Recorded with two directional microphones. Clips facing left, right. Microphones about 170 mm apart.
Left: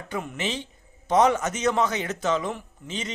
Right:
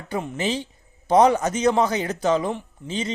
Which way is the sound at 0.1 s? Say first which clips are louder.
Right 5 dB; 30° right (ahead or behind).